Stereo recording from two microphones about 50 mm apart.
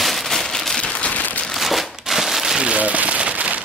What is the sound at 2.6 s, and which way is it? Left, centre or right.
Rain on surface, right.